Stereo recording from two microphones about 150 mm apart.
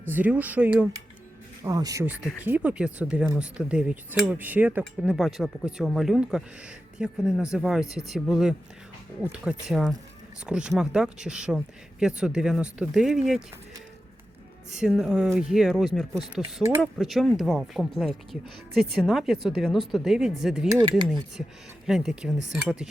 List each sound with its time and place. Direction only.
0.1 s speech: 10° right (ahead or behind)
1.6 s speech: 25° right (ahead or behind)
2.4 s speech: 10° right (ahead or behind)
14.7 s speech: 5° right (ahead or behind)
21.8 s speech: 5° right (ahead or behind)